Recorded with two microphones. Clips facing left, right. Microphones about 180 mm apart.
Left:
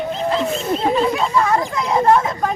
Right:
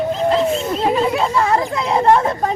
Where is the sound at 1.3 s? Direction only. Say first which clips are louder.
Right 1 dB; 25° right (ahead or behind).